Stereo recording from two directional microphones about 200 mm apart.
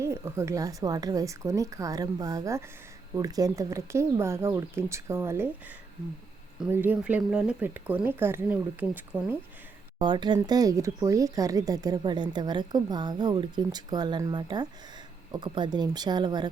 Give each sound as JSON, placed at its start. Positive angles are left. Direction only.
{"t": 0.0, "sound": "speech", "side_deg": -15}
{"t": 10.0, "sound": "speech", "side_deg": -20}